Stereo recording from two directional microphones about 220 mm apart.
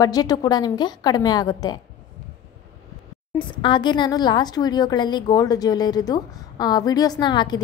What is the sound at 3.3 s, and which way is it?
Speech, 20° left (ahead or behind).